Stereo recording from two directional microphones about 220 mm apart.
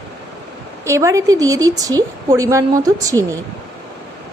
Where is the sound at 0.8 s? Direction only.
15° right (ahead or behind).